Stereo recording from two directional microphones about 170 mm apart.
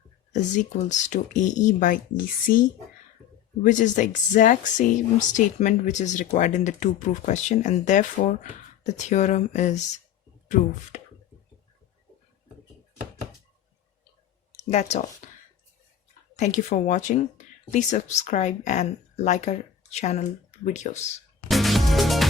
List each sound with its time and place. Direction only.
0.3 s speech: 45° left (ahead or behind)
10.9 s chopping: 45° left (ahead or behind)
14.7 s speech: 40° left (ahead or behind)
15.2 s whispering: 45° left (ahead or behind)
16.3 s speech: 45° left (ahead or behind)
21.4 s music: centre (ahead or behind)